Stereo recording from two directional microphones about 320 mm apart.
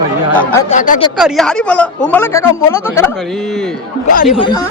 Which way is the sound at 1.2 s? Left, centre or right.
Centre.